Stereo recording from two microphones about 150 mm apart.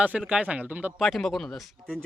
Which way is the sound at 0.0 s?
5° right (ahead or behind).